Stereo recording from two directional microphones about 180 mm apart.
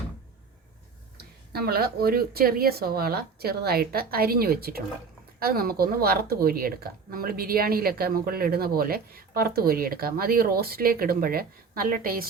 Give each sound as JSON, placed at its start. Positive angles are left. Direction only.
{"t": 1.5, "sound": "speech", "side_deg": -60}